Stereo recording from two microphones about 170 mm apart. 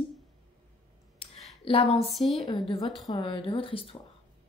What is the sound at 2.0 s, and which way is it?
Speech, centre (ahead or behind).